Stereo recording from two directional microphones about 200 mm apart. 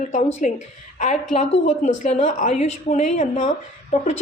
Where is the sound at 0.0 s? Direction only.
35° left (ahead or behind).